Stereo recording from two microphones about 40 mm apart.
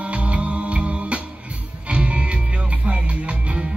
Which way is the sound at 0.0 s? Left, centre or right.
Right.